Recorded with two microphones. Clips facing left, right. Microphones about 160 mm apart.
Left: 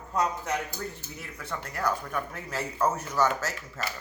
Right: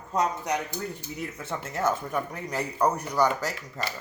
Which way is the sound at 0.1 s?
20° right (ahead or behind).